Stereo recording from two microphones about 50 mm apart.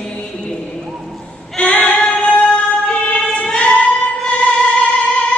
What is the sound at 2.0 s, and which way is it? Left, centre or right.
Music, left.